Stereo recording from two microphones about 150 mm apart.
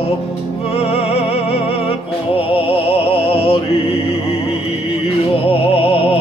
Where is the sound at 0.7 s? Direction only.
40° left (ahead or behind).